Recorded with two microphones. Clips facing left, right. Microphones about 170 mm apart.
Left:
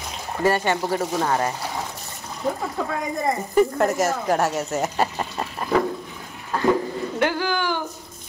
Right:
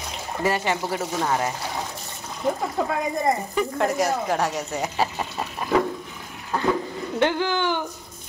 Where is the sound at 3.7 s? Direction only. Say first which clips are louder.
Left 1 dB; centre (ahead or behind).